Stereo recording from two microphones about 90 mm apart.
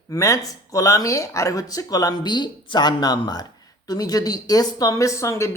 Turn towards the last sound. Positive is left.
turn(degrees=35)  # may be behind; listen again after turning